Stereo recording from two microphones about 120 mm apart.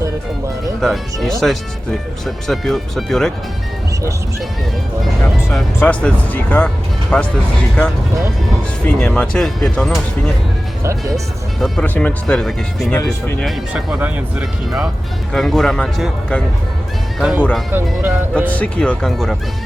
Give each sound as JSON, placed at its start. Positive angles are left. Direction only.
{"t": 0.8, "sound": "speech", "side_deg": 0}
{"t": 5.8, "sound": "speech", "side_deg": 10}
{"t": 9.0, "sound": "speech", "side_deg": 5}
{"t": 11.6, "sound": "speech", "side_deg": 10}
{"t": 13.0, "sound": "speech", "side_deg": 25}
{"t": 13.4, "sound": "speech", "side_deg": -5}
{"t": 15.3, "sound": "speech", "side_deg": 0}
{"t": 17.2, "sound": "speech", "side_deg": -5}
{"t": 17.7, "sound": "speech", "side_deg": -15}
{"t": 18.5, "sound": "speech", "side_deg": 10}